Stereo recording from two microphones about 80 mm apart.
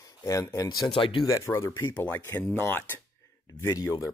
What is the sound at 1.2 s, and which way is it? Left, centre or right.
Speech, left.